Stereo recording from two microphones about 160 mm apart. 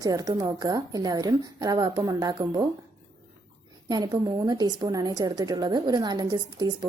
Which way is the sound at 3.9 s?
25° right (ahead or behind).